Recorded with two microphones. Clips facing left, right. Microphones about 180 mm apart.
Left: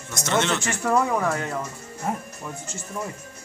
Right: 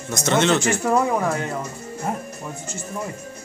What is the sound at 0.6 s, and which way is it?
Speech, 5° right (ahead or behind).